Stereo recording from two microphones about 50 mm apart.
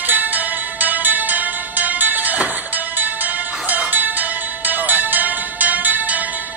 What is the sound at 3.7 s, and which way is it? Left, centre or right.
Music, right.